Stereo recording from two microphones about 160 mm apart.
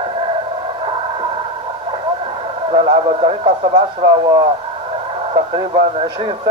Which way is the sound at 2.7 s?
30° right (ahead or behind).